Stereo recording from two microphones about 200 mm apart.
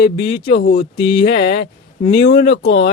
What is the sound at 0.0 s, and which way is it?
A man's voice, 50° left (ahead or behind).